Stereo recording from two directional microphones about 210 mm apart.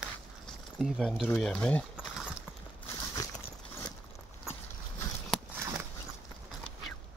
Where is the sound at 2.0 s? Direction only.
5° right (ahead or behind).